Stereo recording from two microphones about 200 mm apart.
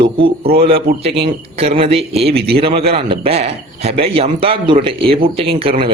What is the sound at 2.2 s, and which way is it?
Speech, 50° right (ahead or behind).